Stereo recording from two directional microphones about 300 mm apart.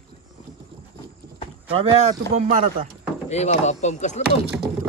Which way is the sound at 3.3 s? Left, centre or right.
Left.